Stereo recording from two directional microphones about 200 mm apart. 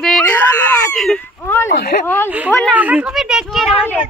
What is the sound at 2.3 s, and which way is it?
A woman's voice, 5° right (ahead or behind).